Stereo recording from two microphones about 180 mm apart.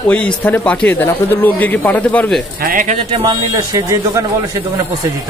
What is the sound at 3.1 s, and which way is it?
A man's voice, 20° right (ahead or behind).